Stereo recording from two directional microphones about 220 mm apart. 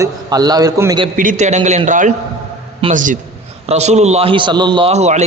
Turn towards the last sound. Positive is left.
turn(degrees=-30)  # may be behind; listen again after turning